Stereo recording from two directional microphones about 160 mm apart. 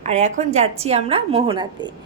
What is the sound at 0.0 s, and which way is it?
A woman's voice, 45° right (ahead or behind).